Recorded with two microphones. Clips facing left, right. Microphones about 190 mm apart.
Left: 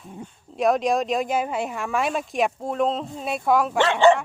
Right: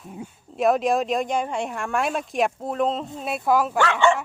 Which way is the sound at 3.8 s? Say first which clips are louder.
Left 7 dB; 30° left (ahead or behind).